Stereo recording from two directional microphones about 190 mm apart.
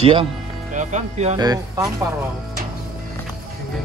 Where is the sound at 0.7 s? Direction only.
40° right (ahead or behind).